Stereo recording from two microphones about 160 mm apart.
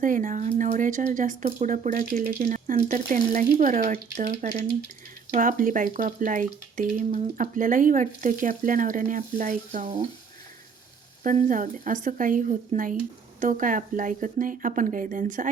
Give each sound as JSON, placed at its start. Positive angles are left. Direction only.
{"t": 0.0, "sound": "speech", "side_deg": -55}
{"t": 2.2, "sound": "a woman's voice", "side_deg": -50}
{"t": 11.2, "sound": "a woman's voice", "side_deg": -55}